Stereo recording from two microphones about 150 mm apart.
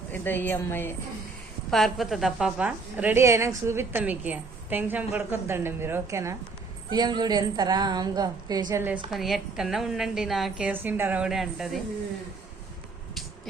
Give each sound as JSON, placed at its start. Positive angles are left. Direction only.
{"t": 0.1, "sound": "a woman's voice", "side_deg": 15}
{"t": 1.7, "sound": "a woman's voice", "side_deg": 0}
{"t": 6.9, "sound": "a woman's voice", "side_deg": -30}
{"t": 9.0, "sound": "a woman's voice", "side_deg": 0}
{"t": 10.7, "sound": "a woman's voice", "side_deg": -15}